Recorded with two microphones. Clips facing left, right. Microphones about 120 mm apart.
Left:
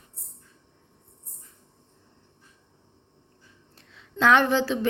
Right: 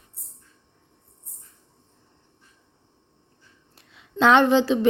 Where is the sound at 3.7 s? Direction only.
15° right (ahead or behind).